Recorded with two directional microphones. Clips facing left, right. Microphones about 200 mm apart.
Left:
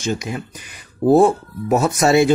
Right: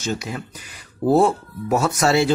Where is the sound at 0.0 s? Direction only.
15° left (ahead or behind).